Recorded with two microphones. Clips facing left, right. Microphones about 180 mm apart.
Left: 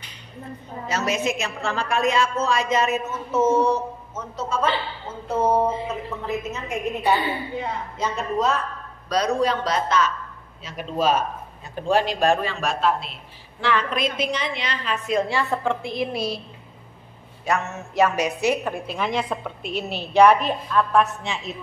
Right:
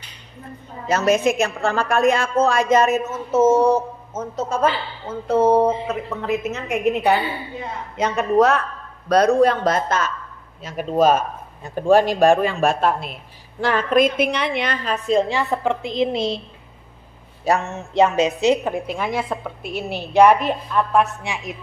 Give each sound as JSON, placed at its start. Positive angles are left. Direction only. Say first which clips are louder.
{"t": 0.8, "sound": "a man's voice", "louder": "right 7 dB", "side_deg": -50}
{"t": 5.9, "sound": "speech", "louder": "right 4 dB", "side_deg": -90}
{"t": 6.2, "sound": "a woman's voice", "louder": "right 6 dB", "side_deg": -75}
{"t": 9.1, "sound": "a man's voice", "louder": "right 7 dB", "side_deg": -55}
{"t": 15.0, "sound": "a woman's voice", "louder": "right 4 dB", "side_deg": -25}
{"t": 17.5, "sound": "a woman's voice", "louder": "right 4 dB", "side_deg": -30}